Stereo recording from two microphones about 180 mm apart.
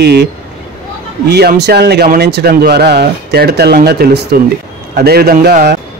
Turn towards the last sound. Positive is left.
turn(degrees=-60)  # may be behind; listen again after turning